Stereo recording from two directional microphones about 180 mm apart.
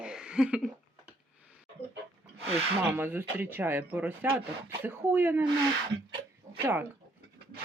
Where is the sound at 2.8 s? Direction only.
10° right (ahead or behind).